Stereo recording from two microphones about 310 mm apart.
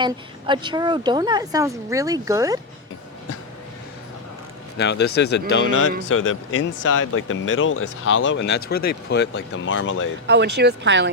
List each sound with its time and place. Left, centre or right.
0.0 s speech: centre
4.8 s speech: left
10.2 s speech: right